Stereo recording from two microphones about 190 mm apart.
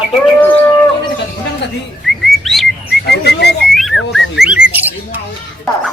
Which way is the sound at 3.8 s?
Centre (ahead or behind).